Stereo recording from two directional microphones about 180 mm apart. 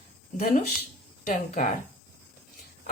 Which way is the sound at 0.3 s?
50° left (ahead or behind).